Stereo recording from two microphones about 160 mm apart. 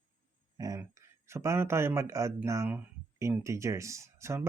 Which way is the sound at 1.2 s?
15° right (ahead or behind).